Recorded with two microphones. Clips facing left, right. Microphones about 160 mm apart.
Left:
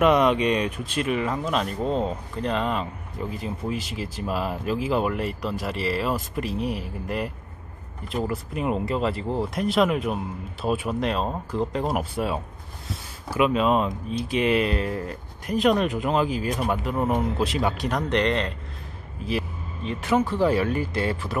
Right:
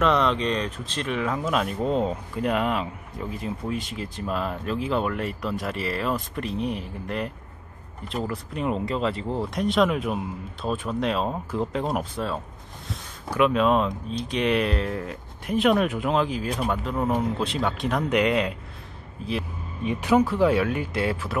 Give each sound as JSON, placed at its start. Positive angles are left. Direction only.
{"t": 0.0, "sound": "speech", "side_deg": 15}
{"t": 19.8, "sound": "speech", "side_deg": -15}
{"t": 20.2, "sound": "speech", "side_deg": 0}